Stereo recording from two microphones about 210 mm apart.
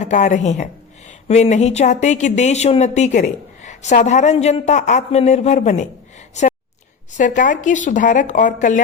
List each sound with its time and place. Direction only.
0.0 s a woman's voice: 35° left (ahead or behind)
7.2 s a woman's voice: 35° left (ahead or behind)